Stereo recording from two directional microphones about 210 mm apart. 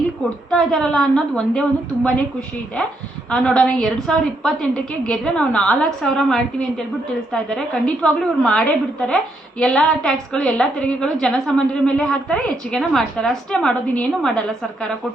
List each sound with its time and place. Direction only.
0.5 s a woman's voice: 5° left (ahead or behind)
3.2 s a woman's voice: 5° left (ahead or behind)
8.0 s a woman's voice: 5° left (ahead or behind)